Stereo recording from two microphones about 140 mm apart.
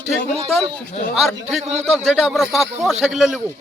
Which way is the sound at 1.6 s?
50° right (ahead or behind).